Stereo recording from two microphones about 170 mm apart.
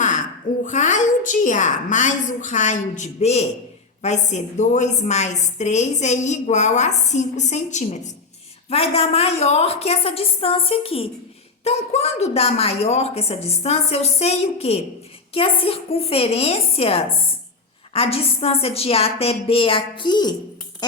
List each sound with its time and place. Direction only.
0.6 s a woman's voice: 45° left (ahead or behind); by 20.3 s 25° left (ahead or behind)